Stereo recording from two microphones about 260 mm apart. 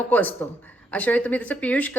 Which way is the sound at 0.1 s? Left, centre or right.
Centre.